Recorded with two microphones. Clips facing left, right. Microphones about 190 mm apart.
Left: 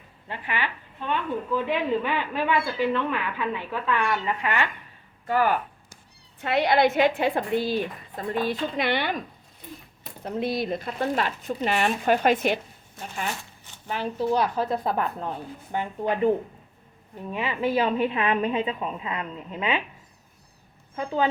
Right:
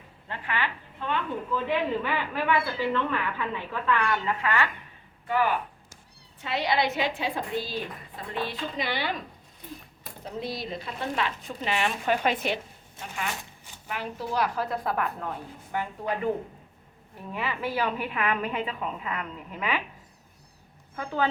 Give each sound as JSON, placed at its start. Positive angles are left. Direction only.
{"t": 0.3, "sound": "a woman's voice", "side_deg": 15}
{"t": 5.2, "sound": "speech", "side_deg": 40}
{"t": 6.4, "sound": "speech", "side_deg": 55}
{"t": 8.8, "sound": "speech", "side_deg": 60}
{"t": 10.2, "sound": "speech", "side_deg": 60}
{"t": 13.0, "sound": "speech", "side_deg": -25}
{"t": 13.8, "sound": "a woman's voice", "side_deg": 30}
{"t": 20.9, "sound": "a woman's voice", "side_deg": 20}